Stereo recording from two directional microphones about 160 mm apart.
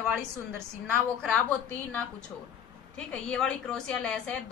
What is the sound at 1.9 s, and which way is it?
A woman's voice, 10° left (ahead or behind).